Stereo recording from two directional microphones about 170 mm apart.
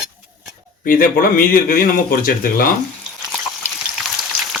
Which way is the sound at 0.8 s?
55° left (ahead or behind).